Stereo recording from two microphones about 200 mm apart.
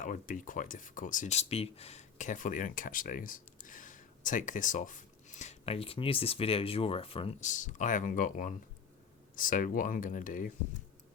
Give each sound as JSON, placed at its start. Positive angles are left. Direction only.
{"t": 0.0, "sound": "speech", "side_deg": 40}